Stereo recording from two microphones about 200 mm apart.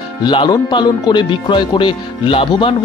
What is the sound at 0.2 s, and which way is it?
Speech, 20° left (ahead or behind).